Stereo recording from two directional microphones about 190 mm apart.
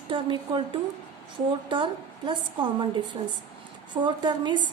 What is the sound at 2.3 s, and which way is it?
A woman's voice, 25° right (ahead or behind).